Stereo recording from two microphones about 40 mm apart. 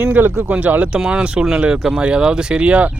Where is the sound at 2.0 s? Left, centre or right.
Right.